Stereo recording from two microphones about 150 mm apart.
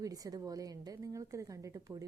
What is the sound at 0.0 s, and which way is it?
A woman's voice, 25° right (ahead or behind).